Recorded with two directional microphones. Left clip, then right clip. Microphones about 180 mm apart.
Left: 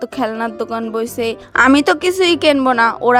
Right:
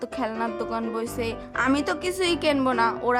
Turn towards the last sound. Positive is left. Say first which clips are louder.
# left 10 dB
turn(degrees=40)  # may be behind; listen again after turning